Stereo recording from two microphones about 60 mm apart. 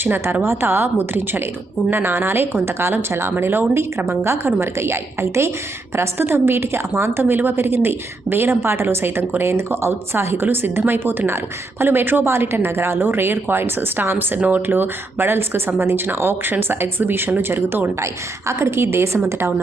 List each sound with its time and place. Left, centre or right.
0.0 s a woman's voice: right
18.0 s a woman's voice: right